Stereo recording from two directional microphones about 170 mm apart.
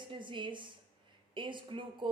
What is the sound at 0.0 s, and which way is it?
Speech, 30° right (ahead or behind).